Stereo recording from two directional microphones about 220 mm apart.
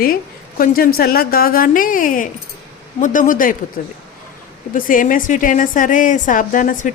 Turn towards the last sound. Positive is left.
turn(degrees=35)  # may be behind; listen again after turning